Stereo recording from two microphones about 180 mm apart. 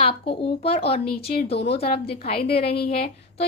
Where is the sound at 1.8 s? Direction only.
65° left (ahead or behind).